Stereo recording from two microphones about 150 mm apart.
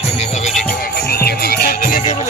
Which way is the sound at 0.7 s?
90° left.